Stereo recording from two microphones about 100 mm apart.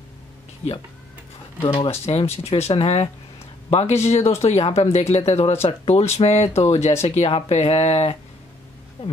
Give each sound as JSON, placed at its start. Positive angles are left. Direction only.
{"t": 1.6, "sound": "speech", "side_deg": 90}
{"t": 3.7, "sound": "speech", "side_deg": 90}